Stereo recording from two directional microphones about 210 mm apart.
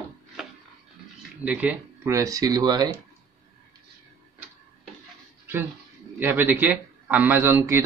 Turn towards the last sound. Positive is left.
turn(degrees=-10)  # may be behind; listen again after turning